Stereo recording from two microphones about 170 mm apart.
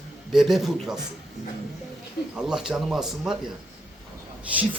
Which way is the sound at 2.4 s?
5° right (ahead or behind).